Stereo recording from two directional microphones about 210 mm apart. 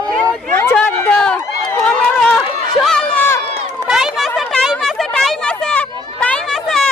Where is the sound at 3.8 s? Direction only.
Centre (ahead or behind).